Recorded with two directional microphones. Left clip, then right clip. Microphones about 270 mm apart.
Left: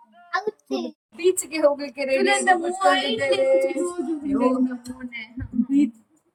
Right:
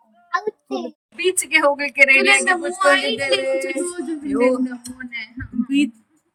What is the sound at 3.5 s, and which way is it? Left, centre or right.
Speech, centre.